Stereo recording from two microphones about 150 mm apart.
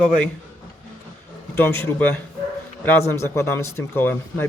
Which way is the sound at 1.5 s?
15° left (ahead or behind).